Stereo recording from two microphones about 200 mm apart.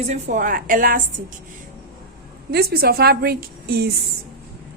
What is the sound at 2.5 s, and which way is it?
A woman's voice, 50° right (ahead or behind).